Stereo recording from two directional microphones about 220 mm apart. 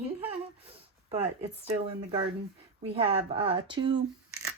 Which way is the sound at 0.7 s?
25° right (ahead or behind).